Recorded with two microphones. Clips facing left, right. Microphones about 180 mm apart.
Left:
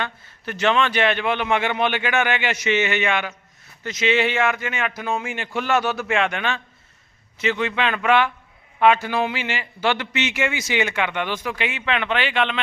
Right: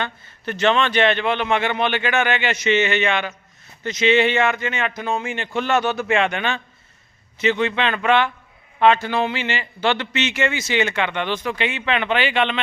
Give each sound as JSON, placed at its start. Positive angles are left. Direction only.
{"t": 0.0, "sound": "a man's voice", "side_deg": 5}